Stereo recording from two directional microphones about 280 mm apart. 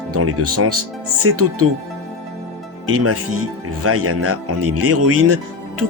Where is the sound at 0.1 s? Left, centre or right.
Right.